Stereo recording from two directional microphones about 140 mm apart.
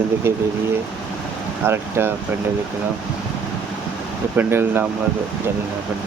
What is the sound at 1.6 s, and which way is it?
Speech, 15° right (ahead or behind).